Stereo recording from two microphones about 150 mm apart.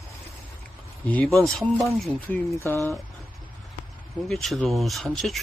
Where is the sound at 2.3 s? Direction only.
20° left (ahead or behind).